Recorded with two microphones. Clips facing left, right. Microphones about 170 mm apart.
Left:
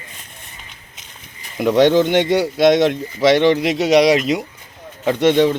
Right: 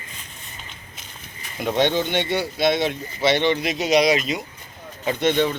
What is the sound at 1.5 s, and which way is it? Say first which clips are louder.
Speech: left 8 dB; 75° left (ahead or behind).